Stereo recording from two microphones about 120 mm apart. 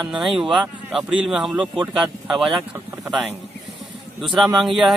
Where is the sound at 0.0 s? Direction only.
Centre (ahead or behind).